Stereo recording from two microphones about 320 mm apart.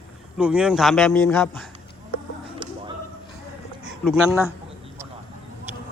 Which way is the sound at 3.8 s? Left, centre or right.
Centre.